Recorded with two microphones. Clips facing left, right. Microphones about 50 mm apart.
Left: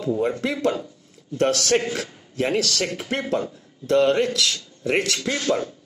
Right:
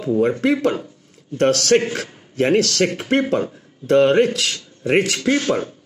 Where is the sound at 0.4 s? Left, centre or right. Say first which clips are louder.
Right 5 dB; right.